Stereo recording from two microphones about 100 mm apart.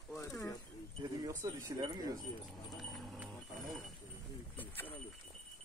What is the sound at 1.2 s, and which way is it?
Speech, 40° right (ahead or behind).